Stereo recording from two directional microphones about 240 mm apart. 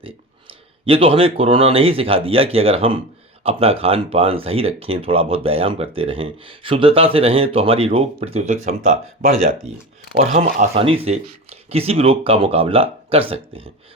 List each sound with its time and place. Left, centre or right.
0.9 s speech: right
10.2 s speech: right